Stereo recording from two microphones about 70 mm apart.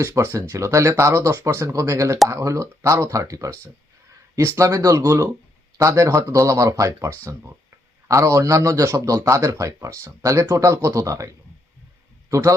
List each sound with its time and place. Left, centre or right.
0.0 s speech: right
4.5 s speech: right